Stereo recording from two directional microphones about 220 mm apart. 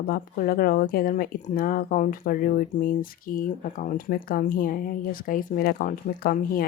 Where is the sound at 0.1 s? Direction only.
40° left (ahead or behind).